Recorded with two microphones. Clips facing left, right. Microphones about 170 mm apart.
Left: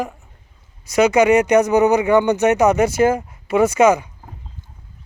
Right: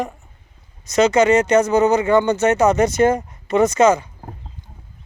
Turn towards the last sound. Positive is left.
turn(degrees=10)  # may be behind; listen again after turning